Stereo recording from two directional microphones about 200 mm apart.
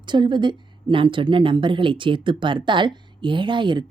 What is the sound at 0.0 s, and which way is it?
Speech, 20° right (ahead or behind).